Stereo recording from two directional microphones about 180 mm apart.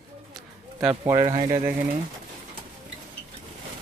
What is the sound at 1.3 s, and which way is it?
Speech, 35° right (ahead or behind).